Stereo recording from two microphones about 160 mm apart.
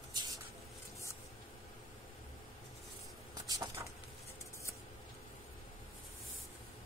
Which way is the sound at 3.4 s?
25° right (ahead or behind).